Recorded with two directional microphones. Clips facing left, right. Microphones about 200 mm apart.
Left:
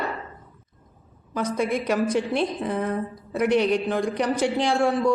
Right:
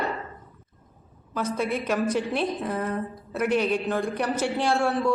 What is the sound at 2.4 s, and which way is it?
Speech, 5° right (ahead or behind).